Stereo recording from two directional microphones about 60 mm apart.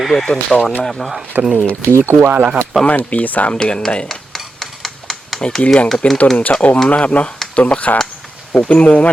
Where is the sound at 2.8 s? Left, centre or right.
Left.